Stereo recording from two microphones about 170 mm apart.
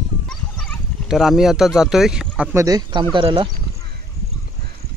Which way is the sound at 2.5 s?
20° right (ahead or behind).